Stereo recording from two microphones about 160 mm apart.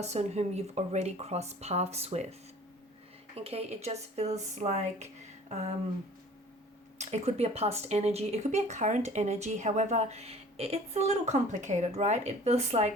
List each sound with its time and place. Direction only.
0.0 s speech: 45° right (ahead or behind)
3.3 s speech: 40° right (ahead or behind)
7.0 s speech: 45° right (ahead or behind)